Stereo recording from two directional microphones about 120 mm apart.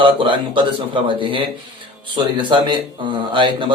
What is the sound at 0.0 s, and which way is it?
A man's voice, 45° right (ahead or behind).